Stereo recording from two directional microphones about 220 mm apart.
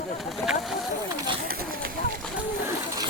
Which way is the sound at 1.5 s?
45° right (ahead or behind).